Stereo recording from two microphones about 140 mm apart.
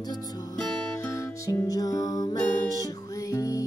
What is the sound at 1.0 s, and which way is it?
Music, 25° left (ahead or behind).